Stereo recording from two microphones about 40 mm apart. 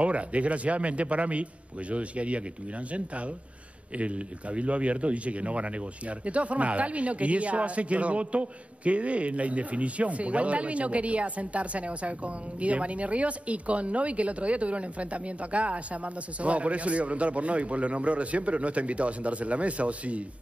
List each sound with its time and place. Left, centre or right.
0.0 s speech: right
3.9 s speech: right